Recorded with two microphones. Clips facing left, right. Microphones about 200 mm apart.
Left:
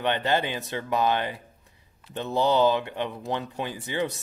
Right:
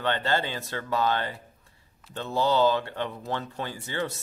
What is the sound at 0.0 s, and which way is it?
Speech, 15° left (ahead or behind).